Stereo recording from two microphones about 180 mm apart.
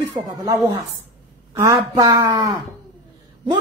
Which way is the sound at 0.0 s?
20° right (ahead or behind).